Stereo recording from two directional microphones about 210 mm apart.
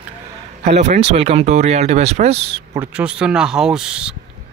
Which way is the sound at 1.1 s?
30° right (ahead or behind).